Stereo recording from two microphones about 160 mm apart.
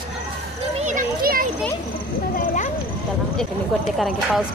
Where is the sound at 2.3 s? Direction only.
55° left (ahead or behind).